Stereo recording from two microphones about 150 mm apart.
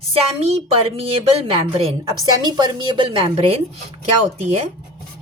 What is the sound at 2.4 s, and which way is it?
Speech, 30° right (ahead or behind).